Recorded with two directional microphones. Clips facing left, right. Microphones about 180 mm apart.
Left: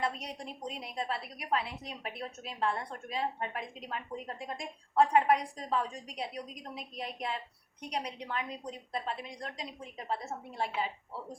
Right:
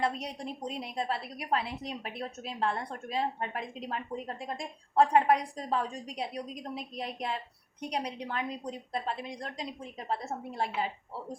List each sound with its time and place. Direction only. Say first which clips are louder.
0.0 s a woman's voice: right 3 dB; 30° right (ahead or behind)